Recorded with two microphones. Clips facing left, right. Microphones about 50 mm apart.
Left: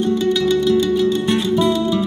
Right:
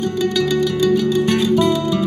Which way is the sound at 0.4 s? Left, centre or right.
Right.